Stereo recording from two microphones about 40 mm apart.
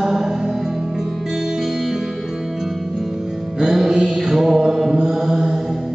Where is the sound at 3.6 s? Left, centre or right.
Centre.